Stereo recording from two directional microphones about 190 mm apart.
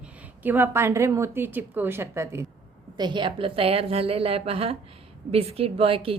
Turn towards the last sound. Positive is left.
turn(degrees=-30)  # may be behind; listen again after turning